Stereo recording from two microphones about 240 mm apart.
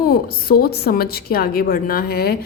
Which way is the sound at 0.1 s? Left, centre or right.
Left.